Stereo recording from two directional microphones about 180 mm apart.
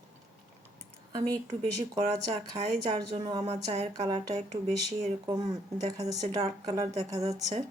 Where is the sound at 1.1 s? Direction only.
20° right (ahead or behind).